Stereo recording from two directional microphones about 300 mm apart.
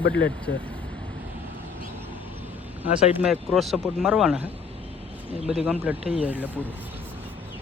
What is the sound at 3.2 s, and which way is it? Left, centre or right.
Speech, centre.